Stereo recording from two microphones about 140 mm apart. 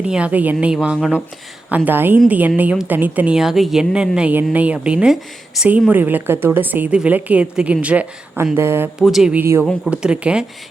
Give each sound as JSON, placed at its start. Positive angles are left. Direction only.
{"t": 0.0, "sound": "a woman's voice", "side_deg": -10}
{"t": 9.0, "sound": "speech", "side_deg": 0}
{"t": 9.4, "sound": "a woman's voice", "side_deg": -15}